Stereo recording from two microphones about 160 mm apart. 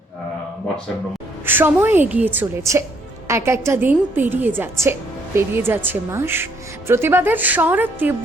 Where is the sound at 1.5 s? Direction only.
10° right (ahead or behind).